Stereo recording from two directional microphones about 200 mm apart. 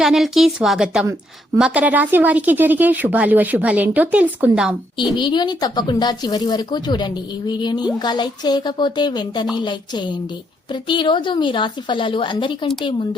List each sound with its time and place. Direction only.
0.0 s speech: centre (ahead or behind)
5.1 s speech: 20° left (ahead or behind)